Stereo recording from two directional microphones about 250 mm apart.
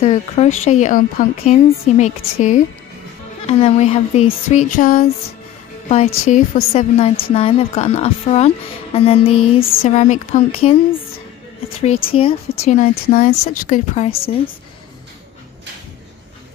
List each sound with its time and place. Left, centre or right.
0.0 s speech: left